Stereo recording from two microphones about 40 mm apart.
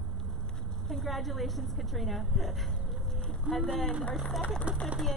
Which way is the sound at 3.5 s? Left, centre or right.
Right.